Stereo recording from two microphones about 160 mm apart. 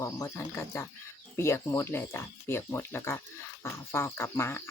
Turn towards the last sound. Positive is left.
turn(degrees=15)  # may be behind; listen again after turning